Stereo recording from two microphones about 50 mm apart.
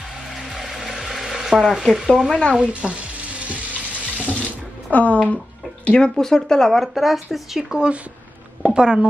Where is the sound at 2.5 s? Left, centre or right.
Right.